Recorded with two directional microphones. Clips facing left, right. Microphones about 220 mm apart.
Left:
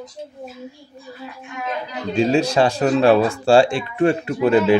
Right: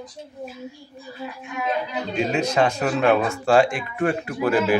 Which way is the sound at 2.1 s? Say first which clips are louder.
Left 6 dB; 30° left (ahead or behind).